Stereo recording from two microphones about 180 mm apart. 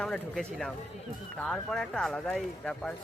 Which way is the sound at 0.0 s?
5° left (ahead or behind).